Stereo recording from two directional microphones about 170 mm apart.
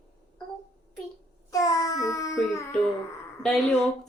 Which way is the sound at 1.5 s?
20° left (ahead or behind).